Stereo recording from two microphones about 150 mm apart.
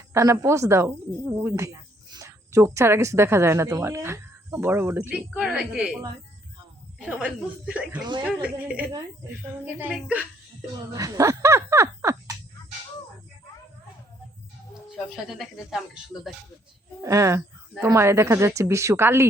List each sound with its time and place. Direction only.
0.1 s a woman's voice: 20° right (ahead or behind)
7.0 s a woman's voice: 5° right (ahead or behind)
10.9 s a sound: 25° right (ahead or behind)
14.8 s speech: centre (ahead or behind)
17.0 s speech: 20° right (ahead or behind)